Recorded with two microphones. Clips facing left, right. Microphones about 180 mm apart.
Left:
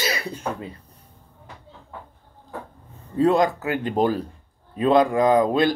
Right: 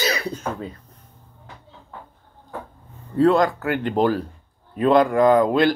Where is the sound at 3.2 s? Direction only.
20° left (ahead or behind).